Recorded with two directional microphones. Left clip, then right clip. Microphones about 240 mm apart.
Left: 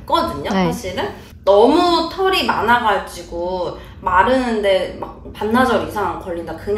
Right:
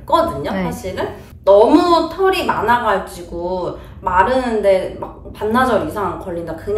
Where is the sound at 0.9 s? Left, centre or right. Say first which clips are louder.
Even; centre.